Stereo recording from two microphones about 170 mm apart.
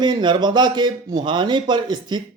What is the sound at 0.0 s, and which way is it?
Speech, 25° right (ahead or behind).